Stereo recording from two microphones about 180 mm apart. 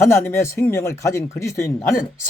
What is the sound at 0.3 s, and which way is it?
A man's voice, 15° left (ahead or behind).